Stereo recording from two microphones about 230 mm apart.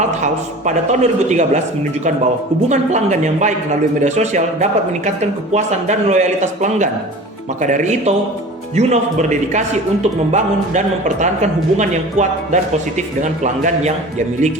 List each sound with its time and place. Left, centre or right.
0.1 s speech: right
2.6 s speech: right